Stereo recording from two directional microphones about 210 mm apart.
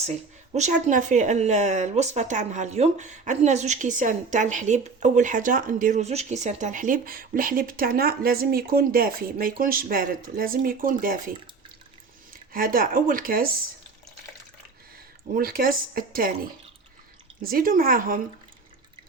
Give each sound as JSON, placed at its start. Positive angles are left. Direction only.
{"t": 0.5, "sound": "speech", "side_deg": -35}
{"t": 12.5, "sound": "speech", "side_deg": -45}
{"t": 15.4, "sound": "speech", "side_deg": -45}